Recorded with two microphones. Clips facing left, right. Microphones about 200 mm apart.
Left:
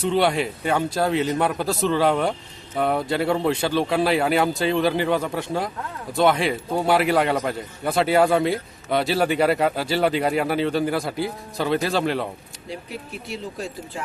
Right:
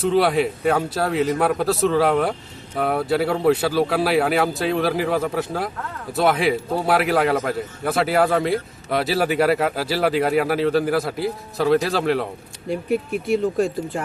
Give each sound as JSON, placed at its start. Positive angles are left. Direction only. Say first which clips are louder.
{"t": 0.0, "sound": "a man's voice", "louder": "right 3 dB", "side_deg": 0}
{"t": 12.6, "sound": "speech", "louder": "right 11 dB", "side_deg": -55}